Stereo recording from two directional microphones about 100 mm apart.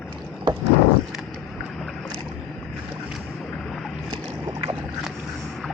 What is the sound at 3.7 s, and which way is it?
Boat, 5° left (ahead or behind).